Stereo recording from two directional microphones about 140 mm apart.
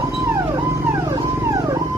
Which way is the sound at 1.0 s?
20° right (ahead or behind).